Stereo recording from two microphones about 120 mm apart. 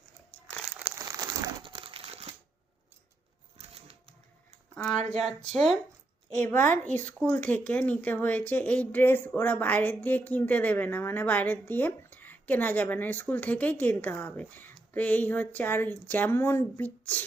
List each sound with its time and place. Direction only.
0.9 s crumpling: 30° right (ahead or behind)
1.6 s crumpling: 45° right (ahead or behind)
4.7 s a sound: 5° left (ahead or behind)
4.9 s speech: 75° right (ahead or behind)
6.4 s speech: 15° left (ahead or behind)